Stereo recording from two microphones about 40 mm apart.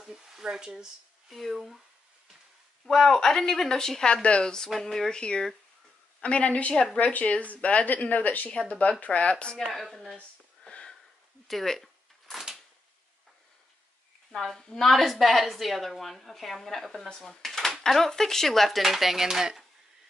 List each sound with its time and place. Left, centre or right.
0.0 s speech: centre
1.3 s a woman's voice: centre
2.8 s speech: centre
4.1 s speech: left
4.7 s speech: centre
5.1 s a woman's voice: left
8.5 s a woman's voice: left
9.6 s a woman's voice: centre
11.4 s a sound: centre
14.3 s a woman's voice: centre